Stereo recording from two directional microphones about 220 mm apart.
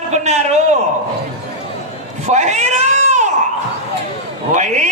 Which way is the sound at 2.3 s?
30° right (ahead or behind).